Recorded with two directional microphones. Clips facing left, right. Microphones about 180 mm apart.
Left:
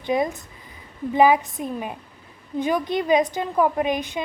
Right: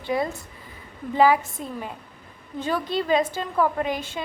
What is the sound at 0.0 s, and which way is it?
A woman's voice, 20° left (ahead or behind).